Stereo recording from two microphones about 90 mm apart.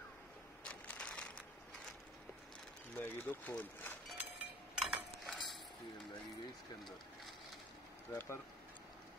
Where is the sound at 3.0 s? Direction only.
20° left (ahead or behind).